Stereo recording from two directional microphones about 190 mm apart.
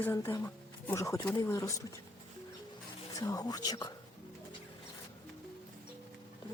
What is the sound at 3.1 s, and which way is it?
Speech, 20° left (ahead or behind).